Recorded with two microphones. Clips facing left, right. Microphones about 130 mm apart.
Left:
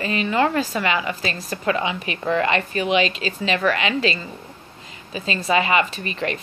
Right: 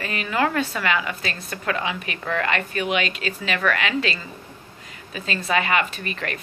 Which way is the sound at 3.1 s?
55° right (ahead or behind).